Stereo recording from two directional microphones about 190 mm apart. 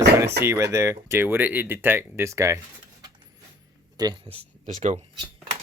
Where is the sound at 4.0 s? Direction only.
25° right (ahead or behind).